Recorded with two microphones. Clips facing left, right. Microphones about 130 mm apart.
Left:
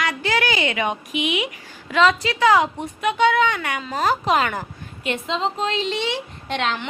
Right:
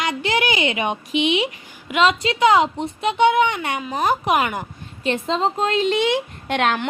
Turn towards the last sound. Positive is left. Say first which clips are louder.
# right 4 dB
turn(degrees=-55)  # may be behind; listen again after turning